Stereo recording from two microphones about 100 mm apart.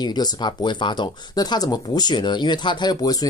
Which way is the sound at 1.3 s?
40° left (ahead or behind).